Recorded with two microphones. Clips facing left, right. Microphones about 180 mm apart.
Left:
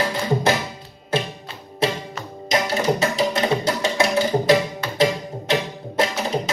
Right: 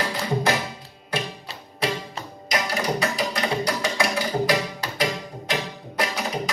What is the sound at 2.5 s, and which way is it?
Music, 25° left (ahead or behind).